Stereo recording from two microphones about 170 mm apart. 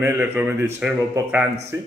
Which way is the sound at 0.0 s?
15° right (ahead or behind).